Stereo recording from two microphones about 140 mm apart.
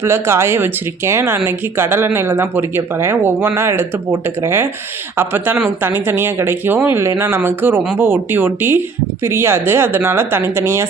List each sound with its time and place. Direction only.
0.0 s speech: 20° right (ahead or behind)